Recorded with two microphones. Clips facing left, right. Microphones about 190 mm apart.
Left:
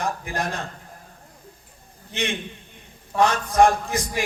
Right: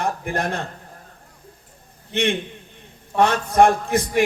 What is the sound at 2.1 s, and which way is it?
A man's voice, 60° right (ahead or behind).